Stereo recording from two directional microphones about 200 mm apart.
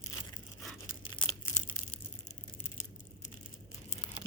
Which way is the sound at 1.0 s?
25° left (ahead or behind).